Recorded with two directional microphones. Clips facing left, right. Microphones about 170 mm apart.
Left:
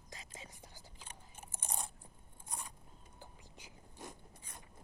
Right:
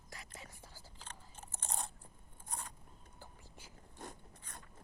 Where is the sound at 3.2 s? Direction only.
15° left (ahead or behind).